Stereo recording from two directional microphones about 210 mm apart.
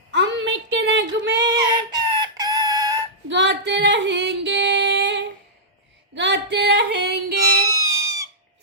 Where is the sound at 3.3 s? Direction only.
55° right (ahead or behind).